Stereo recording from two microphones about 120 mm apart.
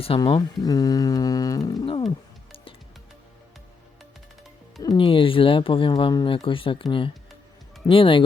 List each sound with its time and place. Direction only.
0.2 s speech: 40° left (ahead or behind)
4.9 s speech: 45° left (ahead or behind)